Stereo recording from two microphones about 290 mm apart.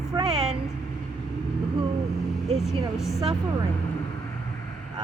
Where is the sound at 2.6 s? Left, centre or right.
Centre.